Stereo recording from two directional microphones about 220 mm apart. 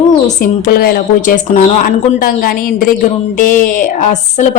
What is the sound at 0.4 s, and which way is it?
Speech, 40° left (ahead or behind).